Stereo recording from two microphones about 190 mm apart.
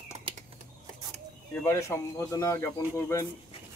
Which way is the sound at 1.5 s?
10° left (ahead or behind).